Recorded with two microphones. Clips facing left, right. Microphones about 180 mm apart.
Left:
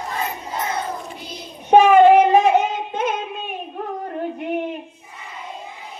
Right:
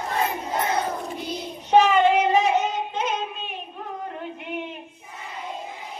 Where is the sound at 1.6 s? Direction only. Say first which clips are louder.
Left 6 dB; 55° left (ahead or behind).